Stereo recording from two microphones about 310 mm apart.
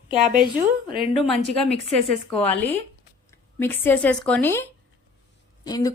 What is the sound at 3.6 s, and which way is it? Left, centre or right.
A woman's voice, centre.